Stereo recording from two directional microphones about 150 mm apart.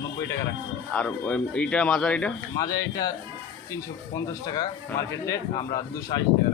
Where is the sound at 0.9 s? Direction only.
10° left (ahead or behind).